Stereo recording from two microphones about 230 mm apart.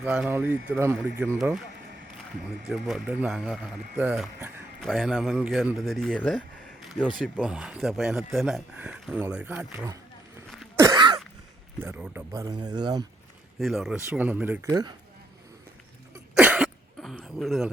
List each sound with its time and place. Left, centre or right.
0.0 s speech: centre
2.6 s speech: centre
6.8 s a sound: centre
7.2 s speech: centre
10.8 s cough: centre
11.8 s speech: centre
13.6 s speech: centre
14.7 s speech: centre
16.3 s cough: centre